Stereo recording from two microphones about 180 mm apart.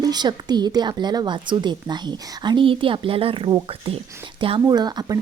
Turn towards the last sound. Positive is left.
turn(degrees=-25)  # may be behind; listen again after turning